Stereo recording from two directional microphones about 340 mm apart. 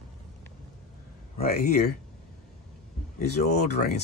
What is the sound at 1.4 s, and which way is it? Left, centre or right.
Speech, left.